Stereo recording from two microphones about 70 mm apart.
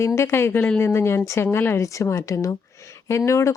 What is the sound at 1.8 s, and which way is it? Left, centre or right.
A woman's voice, left.